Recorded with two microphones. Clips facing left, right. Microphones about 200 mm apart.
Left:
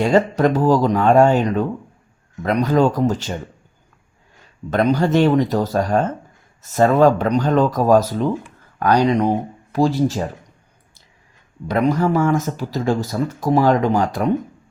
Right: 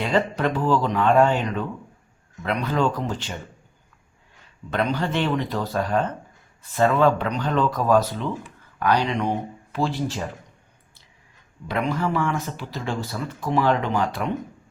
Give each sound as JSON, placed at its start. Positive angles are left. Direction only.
{"t": 0.0, "sound": "speech", "side_deg": 45}
{"t": 4.7, "sound": "speech", "side_deg": 40}
{"t": 11.7, "sound": "speech", "side_deg": 40}